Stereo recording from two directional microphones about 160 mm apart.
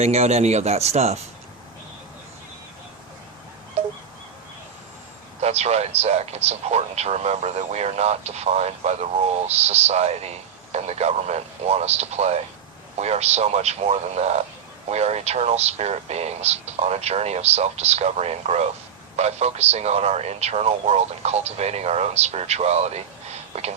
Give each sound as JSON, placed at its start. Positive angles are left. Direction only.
{"t": 0.0, "sound": "speech", "side_deg": -40}
{"t": 5.4, "sound": "speech", "side_deg": -40}